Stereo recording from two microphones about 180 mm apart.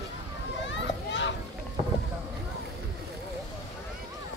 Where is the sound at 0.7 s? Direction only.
90° left.